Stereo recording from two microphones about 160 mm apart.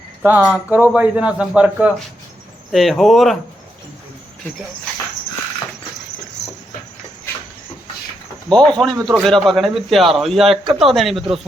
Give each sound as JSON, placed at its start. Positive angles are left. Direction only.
{"t": 0.2, "sound": "a man's voice", "side_deg": -10}
{"t": 8.4, "sound": "speech", "side_deg": 5}
{"t": 8.9, "sound": "speech", "side_deg": -25}
{"t": 9.2, "sound": "speech", "side_deg": 0}